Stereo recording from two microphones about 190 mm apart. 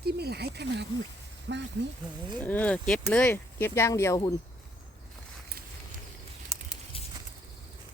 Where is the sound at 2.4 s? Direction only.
10° left (ahead or behind).